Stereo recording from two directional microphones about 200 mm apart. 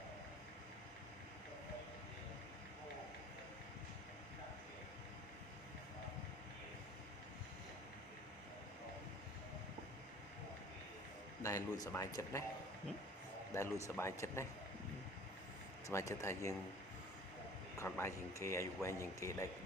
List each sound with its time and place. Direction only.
11.4 s speech: 15° left (ahead or behind)
13.5 s speech: 15° left (ahead or behind)
15.9 s speech: 15° left (ahead or behind)
17.7 s speech: 15° left (ahead or behind)